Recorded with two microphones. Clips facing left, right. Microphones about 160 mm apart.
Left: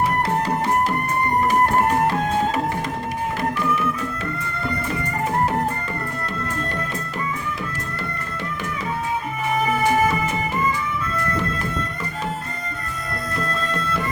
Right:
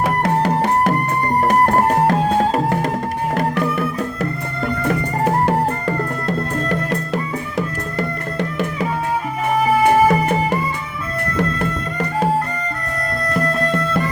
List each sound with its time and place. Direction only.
0.4 s music: 65° right (ahead or behind)
4.9 s music: 70° right (ahead or behind)
9.8 s music: 60° right (ahead or behind)
13.3 s music: 65° right (ahead or behind)